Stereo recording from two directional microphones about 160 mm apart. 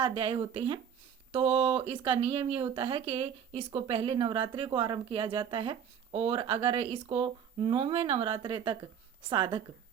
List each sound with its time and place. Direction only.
0.0 s a woman's voice: 35° right (ahead or behind)